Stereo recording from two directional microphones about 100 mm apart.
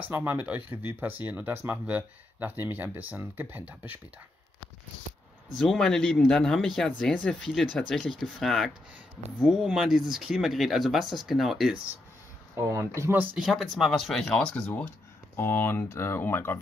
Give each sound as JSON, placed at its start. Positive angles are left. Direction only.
{"t": 0.1, "sound": "speech", "side_deg": -20}
{"t": 5.6, "sound": "speech", "side_deg": 5}
{"t": 12.5, "sound": "speech", "side_deg": -25}
{"t": 13.4, "sound": "speech", "side_deg": 0}
{"t": 15.3, "sound": "speech", "side_deg": 20}